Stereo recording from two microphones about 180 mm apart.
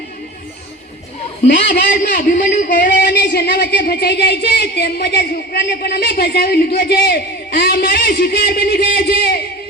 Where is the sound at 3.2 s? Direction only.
60° left (ahead or behind).